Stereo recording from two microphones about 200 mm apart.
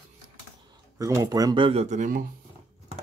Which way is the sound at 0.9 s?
15° right (ahead or behind).